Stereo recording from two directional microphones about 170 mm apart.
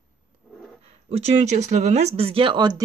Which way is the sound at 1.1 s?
40° right (ahead or behind).